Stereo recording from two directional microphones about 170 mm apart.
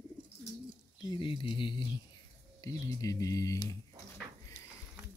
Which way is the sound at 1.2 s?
30° left (ahead or behind).